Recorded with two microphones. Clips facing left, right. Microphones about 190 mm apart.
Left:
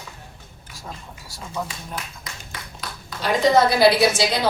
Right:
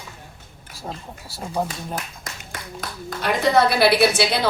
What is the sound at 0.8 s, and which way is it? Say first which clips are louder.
Speech: right 5 dB; 30° right (ahead or behind).